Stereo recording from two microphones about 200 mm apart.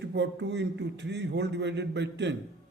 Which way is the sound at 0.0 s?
60° right (ahead or behind).